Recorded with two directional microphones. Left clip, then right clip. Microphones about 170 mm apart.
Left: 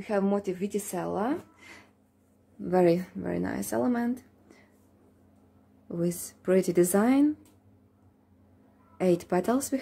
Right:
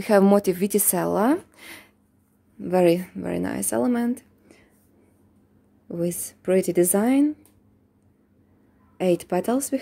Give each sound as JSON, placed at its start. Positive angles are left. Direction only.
{"t": 0.0, "sound": "speech", "side_deg": -90}
{"t": 2.6, "sound": "speech", "side_deg": -40}
{"t": 5.9, "sound": "speech", "side_deg": -20}
{"t": 8.9, "sound": "speech", "side_deg": -20}